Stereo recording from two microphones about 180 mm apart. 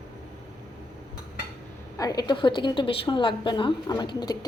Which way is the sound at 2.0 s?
20° left (ahead or behind).